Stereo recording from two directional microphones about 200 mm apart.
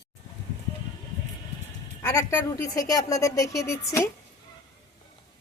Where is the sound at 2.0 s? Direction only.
15° left (ahead or behind).